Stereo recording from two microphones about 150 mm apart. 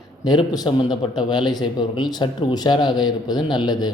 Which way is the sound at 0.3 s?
25° left (ahead or behind).